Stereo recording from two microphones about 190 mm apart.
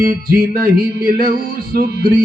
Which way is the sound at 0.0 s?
50° right (ahead or behind).